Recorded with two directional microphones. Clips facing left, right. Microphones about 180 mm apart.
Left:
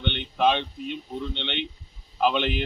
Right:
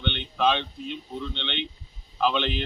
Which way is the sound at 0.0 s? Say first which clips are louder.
Left 2 dB; 15° left (ahead or behind).